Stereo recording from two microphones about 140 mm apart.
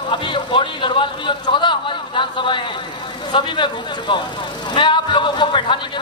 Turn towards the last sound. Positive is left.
turn(degrees=35)  # may be behind; listen again after turning